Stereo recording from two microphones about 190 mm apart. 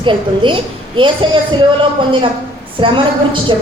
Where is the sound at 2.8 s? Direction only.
25° right (ahead or behind).